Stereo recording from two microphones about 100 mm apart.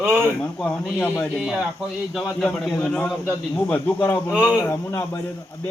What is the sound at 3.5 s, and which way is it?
A man's voice, 15° left (ahead or behind).